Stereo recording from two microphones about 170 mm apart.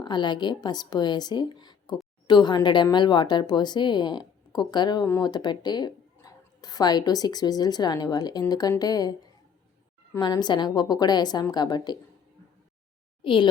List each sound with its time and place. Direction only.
0.0 s speech: 25° left (ahead or behind)
10.2 s speech: 25° left (ahead or behind)
13.2 s speech: 30° left (ahead or behind)